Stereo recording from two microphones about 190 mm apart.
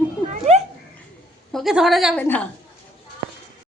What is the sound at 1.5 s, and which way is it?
Speech, centre (ahead or behind).